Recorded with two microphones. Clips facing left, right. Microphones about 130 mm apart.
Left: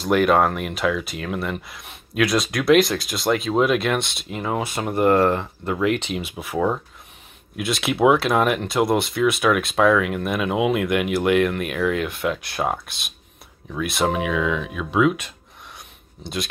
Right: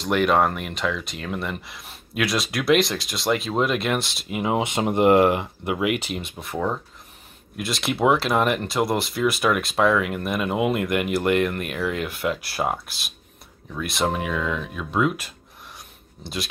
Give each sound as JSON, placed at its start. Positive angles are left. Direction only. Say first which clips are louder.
{"t": 0.0, "sound": "speech", "louder": "left 2 dB", "side_deg": 0}
{"t": 4.4, "sound": "speech", "louder": "right 2 dB", "side_deg": -20}